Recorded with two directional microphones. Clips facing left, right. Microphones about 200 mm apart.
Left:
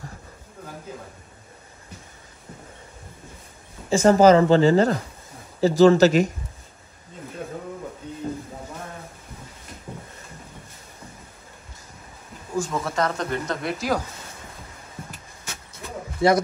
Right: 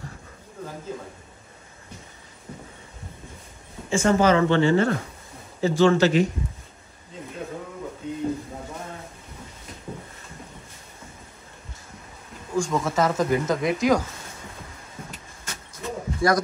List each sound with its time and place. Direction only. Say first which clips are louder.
3.9 s speech: left 5 dB; 40° left (ahead or behind)
12.5 s speech: right 2 dB; 5° left (ahead or behind)
15.7 s a sound: right 5 dB; 25° left (ahead or behind)